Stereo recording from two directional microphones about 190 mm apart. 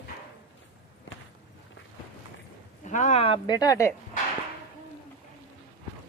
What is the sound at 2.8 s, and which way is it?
Speech, 40° left (ahead or behind).